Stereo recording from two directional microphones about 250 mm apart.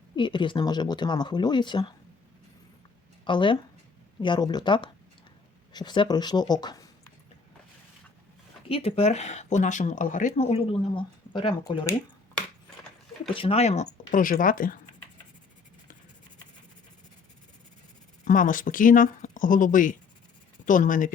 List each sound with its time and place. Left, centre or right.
0.2 s speech: centre
3.2 s speech: centre
8.7 s speech: left
13.2 s speech: left
18.3 s speech: left